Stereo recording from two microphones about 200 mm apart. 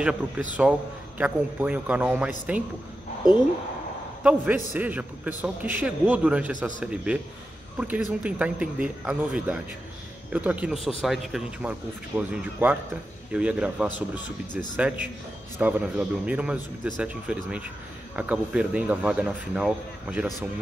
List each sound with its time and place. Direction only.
0.6 s a man's voice: 5° right (ahead or behind)
4.2 s a man's voice: 5° right (ahead or behind)
14.5 s speech: 40° left (ahead or behind)
15.6 s a man's voice: 5° right (ahead or behind)